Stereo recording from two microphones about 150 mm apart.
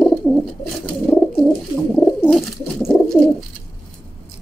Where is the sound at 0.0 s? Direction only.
5° left (ahead or behind).